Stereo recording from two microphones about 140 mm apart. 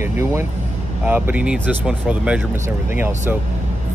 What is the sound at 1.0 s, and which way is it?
Speech, 10° right (ahead or behind).